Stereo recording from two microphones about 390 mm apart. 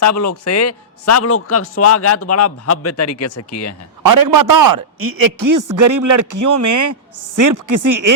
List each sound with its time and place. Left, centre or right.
0.0 s a man's voice: left
4.0 s a man's voice: right